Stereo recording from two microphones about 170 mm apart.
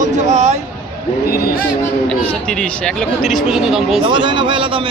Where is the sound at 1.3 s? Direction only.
60° left (ahead or behind).